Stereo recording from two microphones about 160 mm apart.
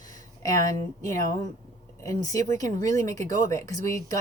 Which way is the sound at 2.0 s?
20° left (ahead or behind).